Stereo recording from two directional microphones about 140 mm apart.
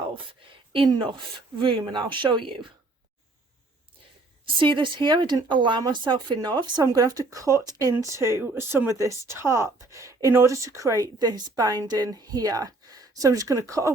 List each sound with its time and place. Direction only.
0.7 s speech: 35° right (ahead or behind)
4.4 s speech: 35° right (ahead or behind)